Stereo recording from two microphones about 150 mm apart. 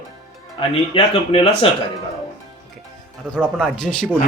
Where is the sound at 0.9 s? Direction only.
40° left (ahead or behind).